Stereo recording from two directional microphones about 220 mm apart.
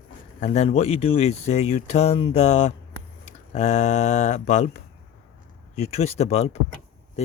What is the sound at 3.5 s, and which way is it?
Mantra, 30° left (ahead or behind).